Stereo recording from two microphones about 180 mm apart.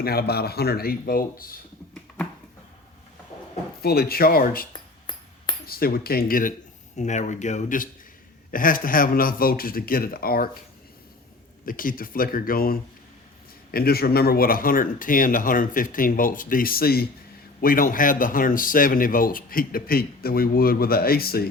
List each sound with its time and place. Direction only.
0.0 s speech: 60° left (ahead or behind)
3.8 s speech: 60° left (ahead or behind)
4.7 s a sound: 25° left (ahead or behind)
5.6 s speech: 55° left (ahead or behind)
6.9 s speech: 40° left (ahead or behind)
11.6 s speech: 50° left (ahead or behind)